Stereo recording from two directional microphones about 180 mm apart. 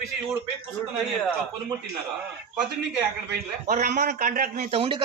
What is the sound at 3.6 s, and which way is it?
A man's voice, 45° right (ahead or behind).